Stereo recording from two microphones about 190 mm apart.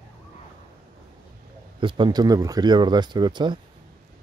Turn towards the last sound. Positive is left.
turn(degrees=-25)  # may be behind; listen again after turning